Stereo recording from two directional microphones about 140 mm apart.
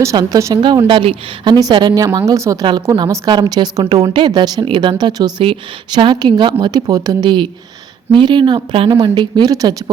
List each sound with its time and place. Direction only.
0.0 s speech: 25° right (ahead or behind)
0.9 s a woman's voice: 35° right (ahead or behind)